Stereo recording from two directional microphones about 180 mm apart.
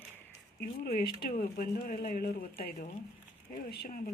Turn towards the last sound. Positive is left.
turn(degrees=60)  # may be behind; listen again after turning